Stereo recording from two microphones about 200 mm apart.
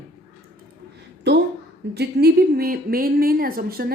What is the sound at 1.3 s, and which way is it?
A woman's voice, 60° right (ahead or behind).